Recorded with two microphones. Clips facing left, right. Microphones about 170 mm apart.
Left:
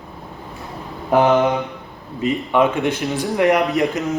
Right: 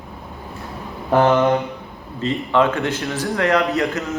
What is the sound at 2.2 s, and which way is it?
Speech, 15° left (ahead or behind).